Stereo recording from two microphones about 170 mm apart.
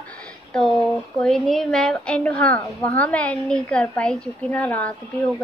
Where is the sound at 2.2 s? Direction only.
15° left (ahead or behind).